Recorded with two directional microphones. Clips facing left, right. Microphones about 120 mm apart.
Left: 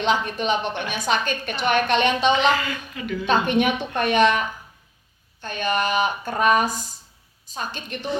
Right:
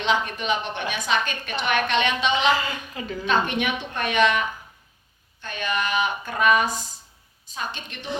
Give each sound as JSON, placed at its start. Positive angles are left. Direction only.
{"t": 0.0, "sound": "speech", "side_deg": 35}
{"t": 2.6, "sound": "a woman's voice", "side_deg": -30}
{"t": 3.2, "sound": "a woman's voice", "side_deg": 40}